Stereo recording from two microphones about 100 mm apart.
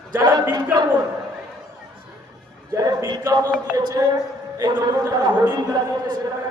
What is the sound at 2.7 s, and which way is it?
A man's voice, 35° right (ahead or behind).